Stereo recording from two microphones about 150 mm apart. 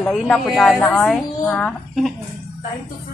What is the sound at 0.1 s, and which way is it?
A woman's voice, centre (ahead or behind).